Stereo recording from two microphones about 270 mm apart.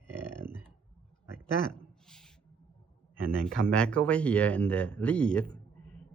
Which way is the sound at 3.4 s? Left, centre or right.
Centre.